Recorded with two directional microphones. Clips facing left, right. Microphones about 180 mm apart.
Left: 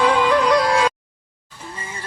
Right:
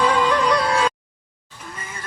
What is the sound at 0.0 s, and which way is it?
Music, 10° left (ahead or behind).